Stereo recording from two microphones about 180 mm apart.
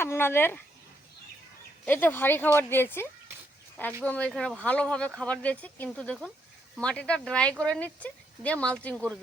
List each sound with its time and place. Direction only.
0.0 s speech: 15° left (ahead or behind)
1.8 s speech: 10° left (ahead or behind)